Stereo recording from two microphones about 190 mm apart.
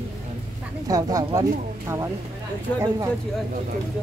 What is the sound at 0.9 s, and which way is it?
Speech, 20° right (ahead or behind).